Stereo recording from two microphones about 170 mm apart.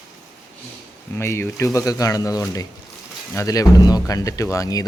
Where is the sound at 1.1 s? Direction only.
15° left (ahead or behind).